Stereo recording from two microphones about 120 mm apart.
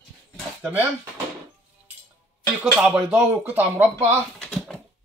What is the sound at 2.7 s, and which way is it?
Speech, 10° right (ahead or behind).